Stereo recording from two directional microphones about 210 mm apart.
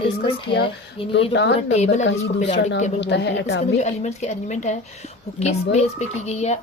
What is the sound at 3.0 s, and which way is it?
Speech, 55° left (ahead or behind).